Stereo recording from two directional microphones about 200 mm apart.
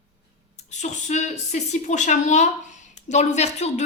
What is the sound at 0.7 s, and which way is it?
A woman's voice, 35° left (ahead or behind).